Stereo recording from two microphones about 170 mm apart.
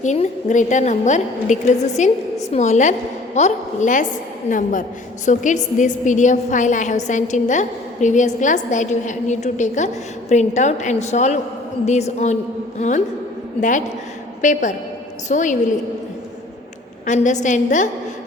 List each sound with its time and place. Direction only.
0.0 s a woman's voice: 45° left (ahead or behind)
13.6 s a woman's voice: 50° left (ahead or behind)
17.1 s a woman's voice: 45° left (ahead or behind)